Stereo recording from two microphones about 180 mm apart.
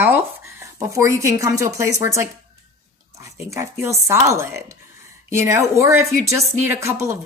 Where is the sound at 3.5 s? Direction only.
15° right (ahead or behind).